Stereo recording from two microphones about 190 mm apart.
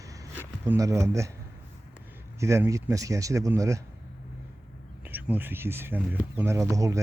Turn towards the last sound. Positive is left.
turn(degrees=-15)  # may be behind; listen again after turning